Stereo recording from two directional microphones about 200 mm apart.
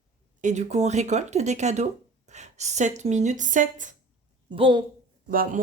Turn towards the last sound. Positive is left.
turn(degrees=-45)  # may be behind; listen again after turning